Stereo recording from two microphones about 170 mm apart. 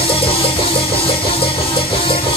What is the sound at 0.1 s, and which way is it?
Music, 30° left (ahead or behind).